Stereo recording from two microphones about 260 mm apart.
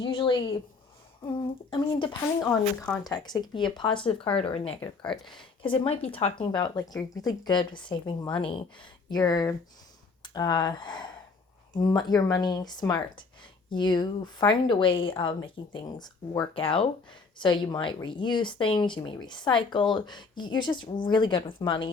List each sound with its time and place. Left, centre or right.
0.0 s speech: centre
2.5 s speech: centre
3.0 s speech: centre
4.8 s speech: centre
5.6 s speech: centre